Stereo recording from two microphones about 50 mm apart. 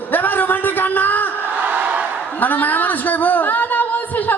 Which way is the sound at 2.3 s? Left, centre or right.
Left.